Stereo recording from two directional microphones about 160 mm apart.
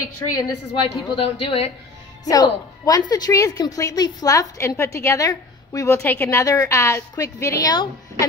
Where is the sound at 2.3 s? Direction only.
25° left (ahead or behind).